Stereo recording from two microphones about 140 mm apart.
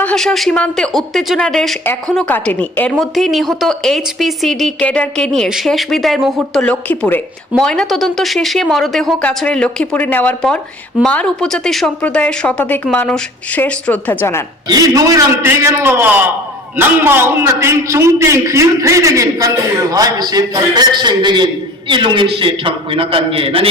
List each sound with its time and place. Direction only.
0.0 s speech: 5° left (ahead or behind)
1.8 s speech: 15° left (ahead or behind)
3.0 s speech: centre (ahead or behind); by 14.4 s 15° left (ahead or behind)
14.7 s a man's voice: 25° right (ahead or behind); by 23.6 s 40° right (ahead or behind)